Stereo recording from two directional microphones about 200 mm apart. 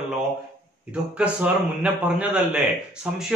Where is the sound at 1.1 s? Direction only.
5° right (ahead or behind).